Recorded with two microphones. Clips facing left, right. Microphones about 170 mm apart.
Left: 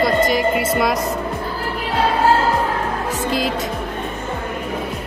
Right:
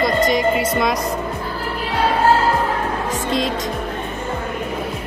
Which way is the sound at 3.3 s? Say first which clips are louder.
Even; 5° left (ahead or behind).